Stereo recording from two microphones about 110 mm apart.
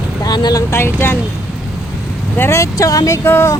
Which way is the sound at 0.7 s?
20° left (ahead or behind).